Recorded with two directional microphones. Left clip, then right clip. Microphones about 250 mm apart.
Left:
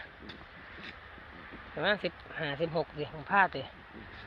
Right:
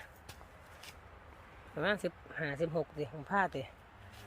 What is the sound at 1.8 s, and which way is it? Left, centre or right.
Speech, right.